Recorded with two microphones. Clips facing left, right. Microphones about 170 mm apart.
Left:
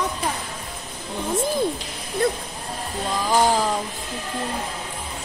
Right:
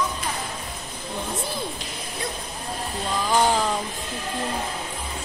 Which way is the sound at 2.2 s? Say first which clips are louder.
Left 11 dB; 55° left (ahead or behind).